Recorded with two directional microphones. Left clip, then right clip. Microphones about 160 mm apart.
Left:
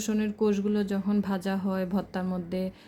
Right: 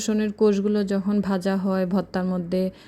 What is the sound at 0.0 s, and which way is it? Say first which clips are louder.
Speech: right 7 dB; 30° right (ahead or behind).